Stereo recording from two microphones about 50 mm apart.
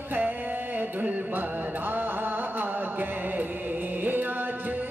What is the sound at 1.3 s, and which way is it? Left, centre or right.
Mantra, right.